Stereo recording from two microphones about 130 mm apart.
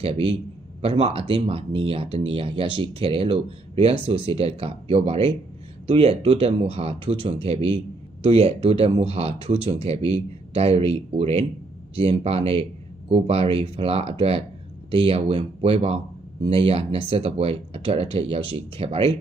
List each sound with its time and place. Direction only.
0.0 s speech: 45° right (ahead or behind)